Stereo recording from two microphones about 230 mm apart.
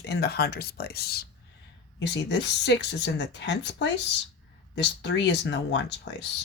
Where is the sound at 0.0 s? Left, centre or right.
Left.